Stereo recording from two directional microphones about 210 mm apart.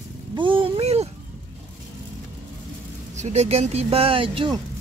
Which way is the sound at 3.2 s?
30° right (ahead or behind).